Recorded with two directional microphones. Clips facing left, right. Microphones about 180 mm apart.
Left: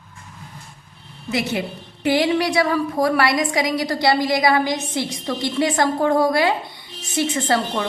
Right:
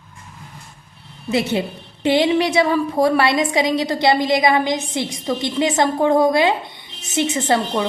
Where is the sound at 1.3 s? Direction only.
25° right (ahead or behind).